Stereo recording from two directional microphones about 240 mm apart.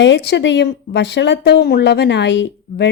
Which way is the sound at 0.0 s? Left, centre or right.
Left.